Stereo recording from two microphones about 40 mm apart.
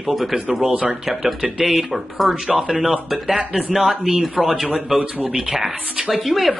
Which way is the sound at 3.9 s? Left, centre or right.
Centre.